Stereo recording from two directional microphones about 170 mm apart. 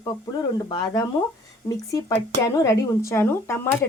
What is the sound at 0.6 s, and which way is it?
A woman's voice, 25° left (ahead or behind).